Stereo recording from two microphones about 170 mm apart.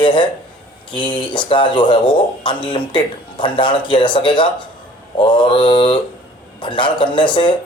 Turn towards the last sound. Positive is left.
turn(degrees=30)  # may be behind; listen again after turning